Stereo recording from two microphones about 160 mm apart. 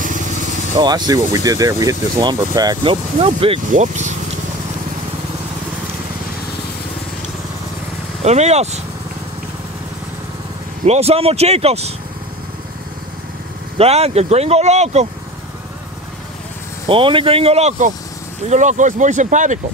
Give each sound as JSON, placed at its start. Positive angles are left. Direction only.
{"t": 0.0, "sound": "vehicle", "side_deg": -55}
{"t": 0.7, "sound": "speech", "side_deg": -25}
{"t": 3.7, "sound": "speech", "side_deg": -50}
{"t": 8.2, "sound": "speech", "side_deg": -45}
{"t": 10.9, "sound": "speech", "side_deg": -40}
{"t": 13.7, "sound": "speech", "side_deg": -40}
{"t": 16.8, "sound": "speech", "side_deg": -35}